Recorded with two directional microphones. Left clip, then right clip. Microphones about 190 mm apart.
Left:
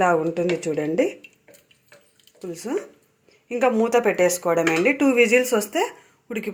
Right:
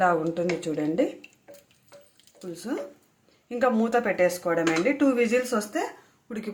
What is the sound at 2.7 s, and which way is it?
Speech, 10° left (ahead or behind).